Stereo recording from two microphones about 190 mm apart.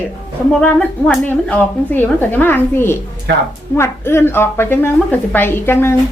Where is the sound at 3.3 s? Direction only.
65° right (ahead or behind).